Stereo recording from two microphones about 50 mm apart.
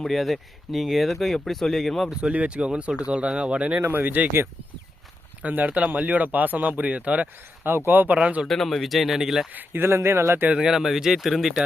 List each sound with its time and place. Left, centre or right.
0.0 s speech: centre
2.3 s speech: right
5.4 s speech: right
7.9 s speech: right
8.1 s speech: right
8.4 s speech: centre
9.5 s speech: right
9.8 s speech: right
10.5 s speech: centre